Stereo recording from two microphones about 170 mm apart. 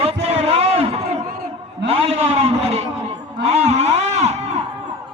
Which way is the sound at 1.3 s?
60° right (ahead or behind).